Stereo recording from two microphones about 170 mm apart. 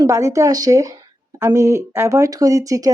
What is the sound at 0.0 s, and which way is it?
Speech, 15° right (ahead or behind).